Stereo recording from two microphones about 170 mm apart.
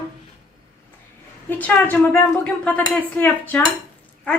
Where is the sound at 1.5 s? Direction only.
10° left (ahead or behind).